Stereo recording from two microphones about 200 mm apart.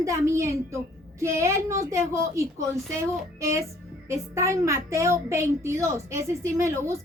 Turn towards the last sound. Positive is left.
turn(degrees=-15)  # may be behind; listen again after turning